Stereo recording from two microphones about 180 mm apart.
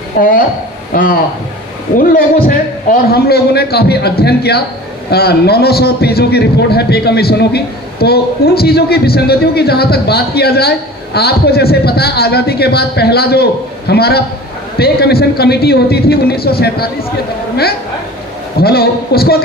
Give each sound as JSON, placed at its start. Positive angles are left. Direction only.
{"t": 0.2, "sound": "a man's voice", "side_deg": 60}
{"t": 18.6, "sound": "a man's voice", "side_deg": 60}